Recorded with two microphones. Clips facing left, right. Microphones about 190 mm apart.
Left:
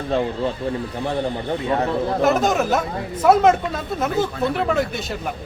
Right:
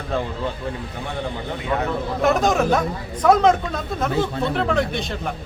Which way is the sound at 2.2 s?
Centre (ahead or behind).